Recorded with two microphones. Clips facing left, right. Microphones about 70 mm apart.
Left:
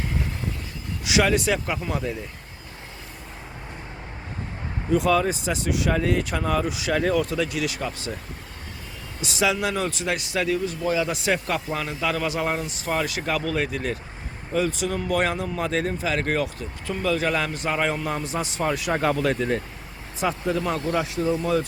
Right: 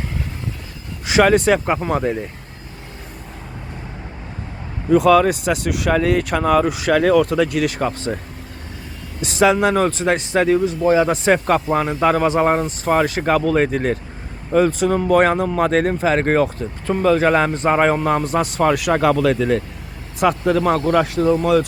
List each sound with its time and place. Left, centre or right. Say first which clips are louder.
1.0 s speech: right 7 dB; right
4.9 s speech: right 8 dB; right
6.9 s speech: right 8 dB; right
9.2 s speech: right 9 dB; right
18.6 s speech: right 8 dB; right
20.1 s speech: right 8 dB; right